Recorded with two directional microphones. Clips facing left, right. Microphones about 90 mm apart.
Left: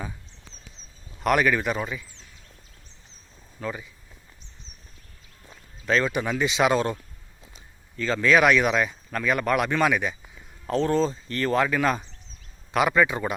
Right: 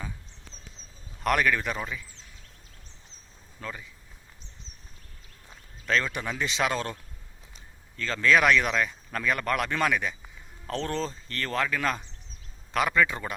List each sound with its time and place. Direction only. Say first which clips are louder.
1.2 s speech: left 3 dB; 10° left (ahead or behind)
3.6 s speech: left 6 dB; 10° left (ahead or behind)
5.8 s speech: left 4 dB; 10° left (ahead or behind)